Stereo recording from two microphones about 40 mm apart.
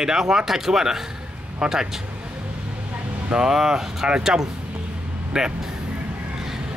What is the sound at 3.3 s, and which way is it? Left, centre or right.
Speech, centre.